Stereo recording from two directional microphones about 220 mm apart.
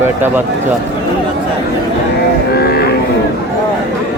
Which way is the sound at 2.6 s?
45° left (ahead or behind).